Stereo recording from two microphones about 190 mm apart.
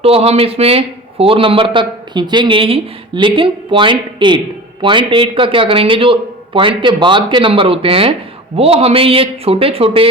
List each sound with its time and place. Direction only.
0.0 s a man's voice: 30° right (ahead or behind)